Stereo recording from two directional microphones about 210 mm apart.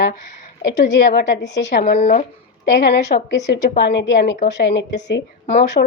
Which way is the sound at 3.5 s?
55° left (ahead or behind).